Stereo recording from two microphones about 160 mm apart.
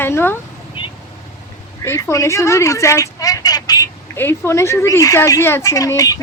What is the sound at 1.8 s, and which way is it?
Speech, 15° left (ahead or behind).